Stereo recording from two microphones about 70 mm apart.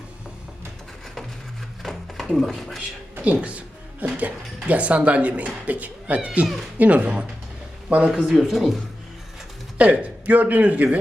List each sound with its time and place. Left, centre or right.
1.8 s a sound: centre
3.2 s speech: centre
8.1 s speech: centre
9.7 s speech: centre